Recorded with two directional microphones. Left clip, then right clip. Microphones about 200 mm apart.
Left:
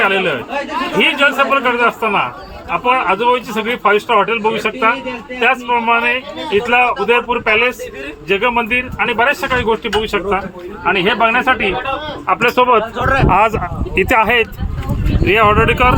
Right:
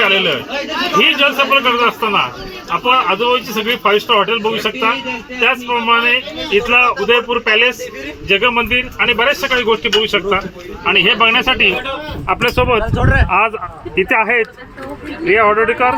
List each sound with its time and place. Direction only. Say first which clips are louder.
0.0 s a man's voice: right 1 dB; 20° left (ahead or behind)
10.8 s a man's voice: right 2 dB; 10° left (ahead or behind)
13.2 s a man's voice: left 2 dB; 30° left (ahead or behind)